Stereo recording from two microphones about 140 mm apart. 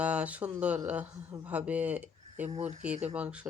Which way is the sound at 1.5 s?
10° right (ahead or behind).